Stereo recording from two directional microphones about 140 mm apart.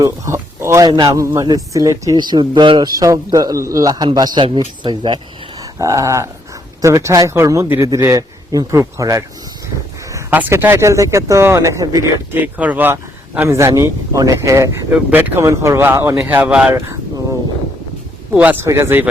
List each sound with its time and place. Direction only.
0.0 s speech: 20° right (ahead or behind)
5.8 s speech: 25° right (ahead or behind)
12.4 s speech: 10° right (ahead or behind)
18.3 s speech: 15° right (ahead or behind)